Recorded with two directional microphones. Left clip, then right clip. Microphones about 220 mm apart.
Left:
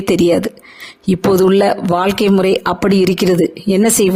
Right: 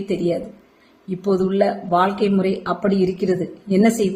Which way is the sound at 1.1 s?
50° left (ahead or behind).